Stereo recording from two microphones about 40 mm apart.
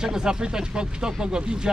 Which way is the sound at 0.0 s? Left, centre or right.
Centre.